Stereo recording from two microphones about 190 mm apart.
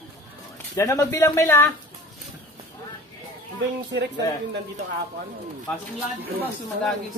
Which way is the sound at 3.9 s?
65° right (ahead or behind).